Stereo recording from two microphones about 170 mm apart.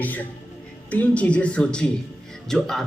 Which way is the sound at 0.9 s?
10° left (ahead or behind).